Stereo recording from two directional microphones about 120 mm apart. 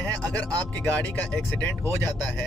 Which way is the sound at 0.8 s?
15° left (ahead or behind).